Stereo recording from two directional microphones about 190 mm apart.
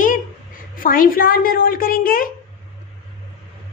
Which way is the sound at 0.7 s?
45° left (ahead or behind).